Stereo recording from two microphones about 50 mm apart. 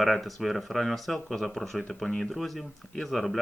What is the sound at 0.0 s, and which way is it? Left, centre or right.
Speech, centre.